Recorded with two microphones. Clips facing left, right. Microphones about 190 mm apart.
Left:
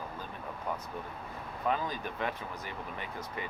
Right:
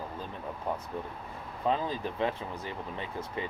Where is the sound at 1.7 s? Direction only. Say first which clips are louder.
Right 3 dB; 25° right (ahead or behind).